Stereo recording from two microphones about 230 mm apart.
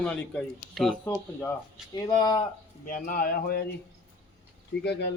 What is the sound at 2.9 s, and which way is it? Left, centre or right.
Speech, left.